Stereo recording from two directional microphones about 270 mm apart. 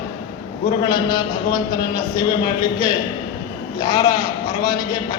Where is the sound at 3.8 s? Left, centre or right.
Centre.